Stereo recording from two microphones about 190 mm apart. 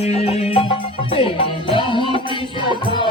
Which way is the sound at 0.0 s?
30° left (ahead or behind).